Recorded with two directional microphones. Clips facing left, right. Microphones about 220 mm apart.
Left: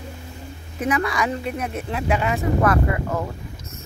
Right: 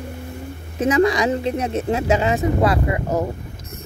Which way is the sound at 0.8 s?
25° right (ahead or behind).